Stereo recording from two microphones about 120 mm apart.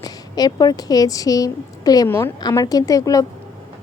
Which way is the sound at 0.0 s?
35° left (ahead or behind).